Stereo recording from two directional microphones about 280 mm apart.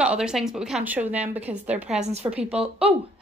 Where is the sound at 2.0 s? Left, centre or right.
Right.